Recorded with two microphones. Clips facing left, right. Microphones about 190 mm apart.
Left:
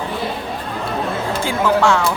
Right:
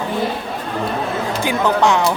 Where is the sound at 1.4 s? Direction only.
15° right (ahead or behind).